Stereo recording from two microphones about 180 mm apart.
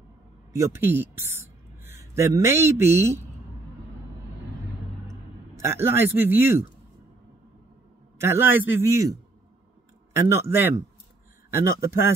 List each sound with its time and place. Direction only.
0.6 s speech: 15° right (ahead or behind)
5.6 s a man's voice: 15° right (ahead or behind)
8.2 s a man's voice: 15° right (ahead or behind)
10.1 s a man's voice: 15° right (ahead or behind)